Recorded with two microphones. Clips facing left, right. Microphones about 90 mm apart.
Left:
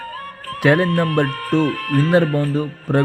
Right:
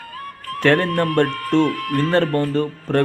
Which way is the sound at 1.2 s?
40° left (ahead or behind).